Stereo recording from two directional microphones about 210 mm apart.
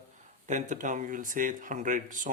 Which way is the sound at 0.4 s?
35° right (ahead or behind).